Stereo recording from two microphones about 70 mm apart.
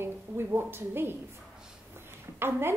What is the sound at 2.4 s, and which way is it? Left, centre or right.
Speech, right.